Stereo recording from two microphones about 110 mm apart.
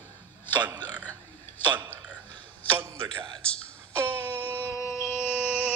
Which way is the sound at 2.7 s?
25° right (ahead or behind).